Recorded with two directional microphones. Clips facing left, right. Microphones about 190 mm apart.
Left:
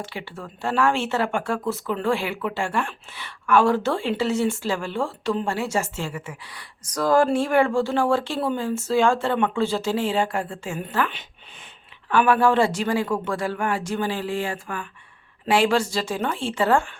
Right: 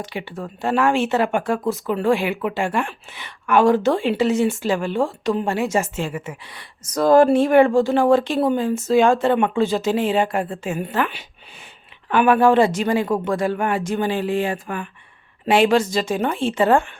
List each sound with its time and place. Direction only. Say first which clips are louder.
0.0 s speech: right 5 dB; 15° right (ahead or behind)